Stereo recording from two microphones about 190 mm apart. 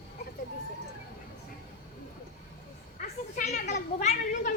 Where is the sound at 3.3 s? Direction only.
45° left (ahead or behind).